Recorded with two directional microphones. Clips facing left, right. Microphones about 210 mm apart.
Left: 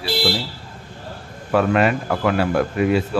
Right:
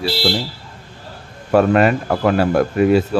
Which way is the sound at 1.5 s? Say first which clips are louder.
Right 4 dB; 40° right (ahead or behind).